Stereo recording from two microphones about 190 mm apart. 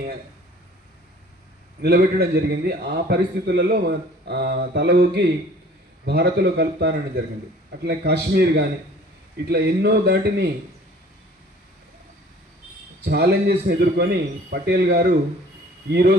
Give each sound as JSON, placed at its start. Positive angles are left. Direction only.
{"t": 1.8, "sound": "a man's voice", "side_deg": -60}
{"t": 13.1, "sound": "a man's voice", "side_deg": -60}